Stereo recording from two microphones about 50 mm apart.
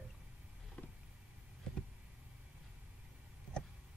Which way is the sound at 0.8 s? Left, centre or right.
Left.